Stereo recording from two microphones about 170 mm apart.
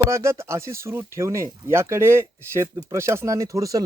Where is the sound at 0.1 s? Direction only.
15° right (ahead or behind).